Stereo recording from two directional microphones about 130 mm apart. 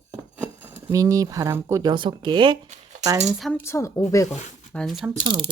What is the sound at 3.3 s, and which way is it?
Speech, centre (ahead or behind).